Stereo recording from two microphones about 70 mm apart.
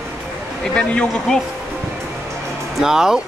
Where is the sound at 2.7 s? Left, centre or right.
Centre.